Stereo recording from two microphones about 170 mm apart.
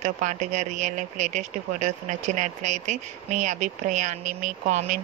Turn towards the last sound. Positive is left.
turn(degrees=-50)  # may be behind; listen again after turning